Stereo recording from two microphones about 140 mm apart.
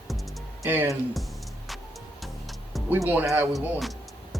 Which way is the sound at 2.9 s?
10° right (ahead or behind).